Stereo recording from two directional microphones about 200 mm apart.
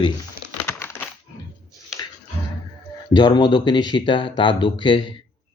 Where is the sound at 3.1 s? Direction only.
20° left (ahead or behind).